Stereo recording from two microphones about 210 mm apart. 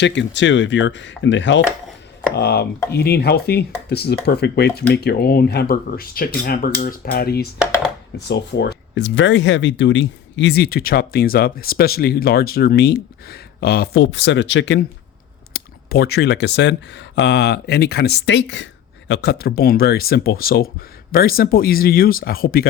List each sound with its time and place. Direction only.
0.0 s speech: 60° left (ahead or behind)
2.3 s speech: 50° left (ahead or behind)
15.5 s speech: 45° left (ahead or behind)